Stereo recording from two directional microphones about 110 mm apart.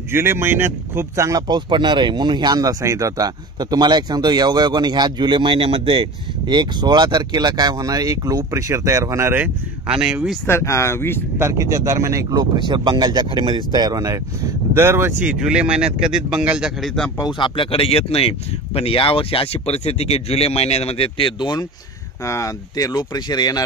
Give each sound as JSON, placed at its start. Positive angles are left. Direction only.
{"t": 0.1, "sound": "speech", "side_deg": -20}
{"t": 1.5, "sound": "speech", "side_deg": -45}
{"t": 9.8, "sound": "speech", "side_deg": -10}
{"t": 10.4, "sound": "speech", "side_deg": 25}
{"t": 11.3, "sound": "speech", "side_deg": -25}
{"t": 14.8, "sound": "speech", "side_deg": -20}
{"t": 17.2, "sound": "speech", "side_deg": 50}
{"t": 22.2, "sound": "speech", "side_deg": 30}